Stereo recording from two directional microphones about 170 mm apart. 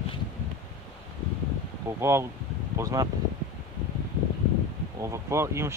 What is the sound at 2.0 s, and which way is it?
Speech, 15° right (ahead or behind).